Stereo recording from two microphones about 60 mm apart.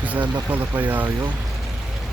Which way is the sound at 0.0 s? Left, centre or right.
Right.